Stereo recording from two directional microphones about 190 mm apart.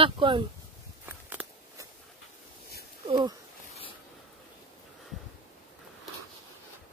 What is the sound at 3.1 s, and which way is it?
Speech, 25° right (ahead or behind).